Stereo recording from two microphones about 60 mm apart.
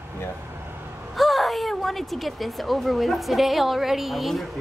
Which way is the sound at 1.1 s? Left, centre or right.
Centre.